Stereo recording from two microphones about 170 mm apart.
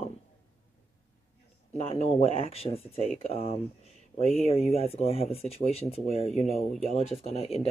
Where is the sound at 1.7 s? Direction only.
35° left (ahead or behind).